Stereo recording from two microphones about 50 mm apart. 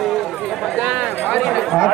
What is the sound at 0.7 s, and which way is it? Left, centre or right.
Speech, centre.